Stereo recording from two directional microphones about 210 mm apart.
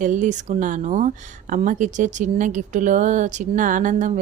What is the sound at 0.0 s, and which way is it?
Speech, 35° right (ahead or behind).